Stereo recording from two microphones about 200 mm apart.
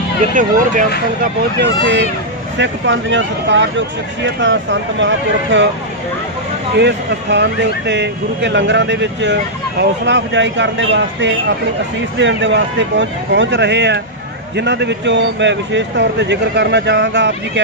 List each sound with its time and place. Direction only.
0.3 s speech: 40° right (ahead or behind)
1.2 s speech: 55° right (ahead or behind)
6.8 s speech: 60° right (ahead or behind)